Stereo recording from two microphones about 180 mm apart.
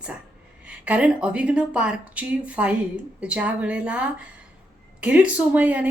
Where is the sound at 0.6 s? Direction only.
5° right (ahead or behind).